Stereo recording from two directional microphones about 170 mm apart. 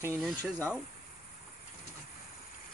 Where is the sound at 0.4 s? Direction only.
10° left (ahead or behind).